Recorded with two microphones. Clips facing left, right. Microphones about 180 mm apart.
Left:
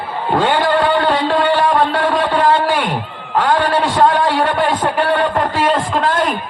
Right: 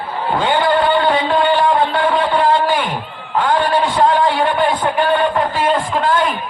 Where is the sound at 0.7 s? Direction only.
75° left (ahead or behind).